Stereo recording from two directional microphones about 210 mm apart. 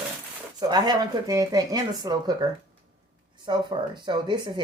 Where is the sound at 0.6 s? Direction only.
20° right (ahead or behind).